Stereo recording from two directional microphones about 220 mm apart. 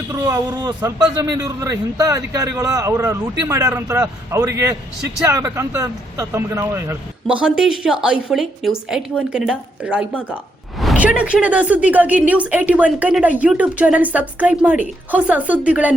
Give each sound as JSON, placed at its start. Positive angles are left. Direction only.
{"t": 0.1, "sound": "a man's voice", "side_deg": -15}
{"t": 10.2, "sound": "a man's voice", "side_deg": 5}